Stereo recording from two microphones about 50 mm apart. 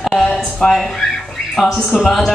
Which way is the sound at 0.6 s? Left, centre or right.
Centre.